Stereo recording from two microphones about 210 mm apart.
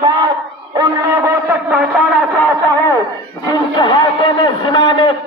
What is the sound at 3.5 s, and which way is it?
A man's voice, 20° left (ahead or behind).